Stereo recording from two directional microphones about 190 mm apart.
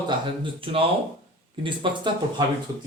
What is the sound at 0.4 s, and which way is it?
A man's voice, 30° right (ahead or behind).